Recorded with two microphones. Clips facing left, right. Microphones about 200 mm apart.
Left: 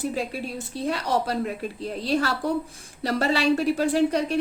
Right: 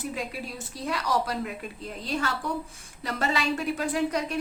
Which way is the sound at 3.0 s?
35° left (ahead or behind).